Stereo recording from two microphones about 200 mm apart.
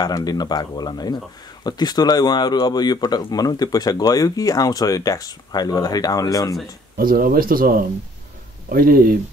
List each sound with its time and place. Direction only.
0.0 s speech: 20° left (ahead or behind)
7.0 s speech: 45° right (ahead or behind)